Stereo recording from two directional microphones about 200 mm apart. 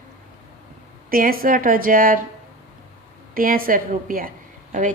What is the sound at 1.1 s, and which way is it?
A woman's voice, 45° right (ahead or behind).